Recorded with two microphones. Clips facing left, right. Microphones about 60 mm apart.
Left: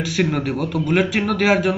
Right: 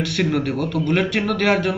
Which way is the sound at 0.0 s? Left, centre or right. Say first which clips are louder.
Even; centre.